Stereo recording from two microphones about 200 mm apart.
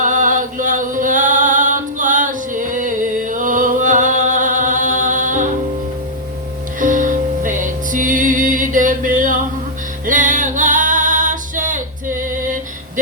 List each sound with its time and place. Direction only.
0.0 s a sound: 40° right (ahead or behind)
6.7 s music: 40° right (ahead or behind)
10.1 s female singing: 40° right (ahead or behind)